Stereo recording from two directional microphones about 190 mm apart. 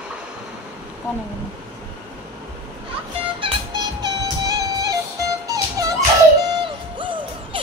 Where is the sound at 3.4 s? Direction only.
20° right (ahead or behind).